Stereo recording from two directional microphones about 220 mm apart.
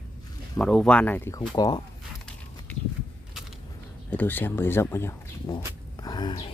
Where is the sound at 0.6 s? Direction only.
Centre (ahead or behind); by 1.8 s 20° left (ahead or behind).